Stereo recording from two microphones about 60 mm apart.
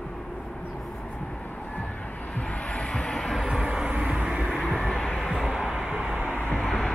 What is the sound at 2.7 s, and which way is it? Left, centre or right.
Vehicle, centre.